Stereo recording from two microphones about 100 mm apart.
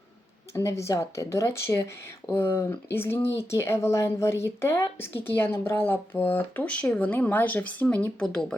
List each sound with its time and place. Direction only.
0.5 s speech: 30° left (ahead or behind); by 8.5 s 10° left (ahead or behind)